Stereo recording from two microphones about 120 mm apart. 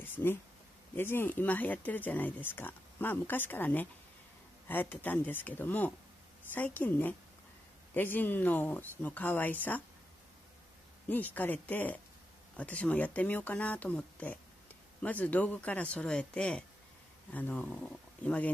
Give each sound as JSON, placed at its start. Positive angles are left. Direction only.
{"t": 0.0, "sound": "a sound", "side_deg": 15}
{"t": 0.9, "sound": "speech", "side_deg": 20}
{"t": 11.1, "sound": "speech", "side_deg": 15}